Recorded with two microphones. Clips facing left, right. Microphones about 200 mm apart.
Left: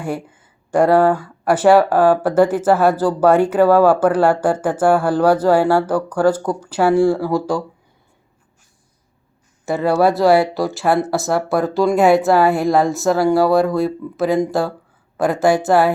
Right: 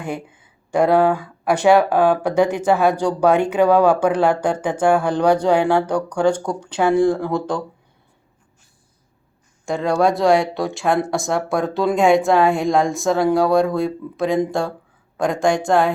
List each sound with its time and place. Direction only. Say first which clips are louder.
0.7 s speech: left 2 dB; 10° left (ahead or behind)
9.6 s speech: left 2 dB; 5° left (ahead or behind)